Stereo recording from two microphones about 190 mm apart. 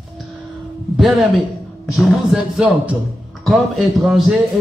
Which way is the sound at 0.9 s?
Centre (ahead or behind).